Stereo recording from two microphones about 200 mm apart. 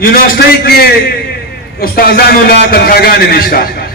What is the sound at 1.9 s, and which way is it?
A man's voice, 50° left (ahead or behind).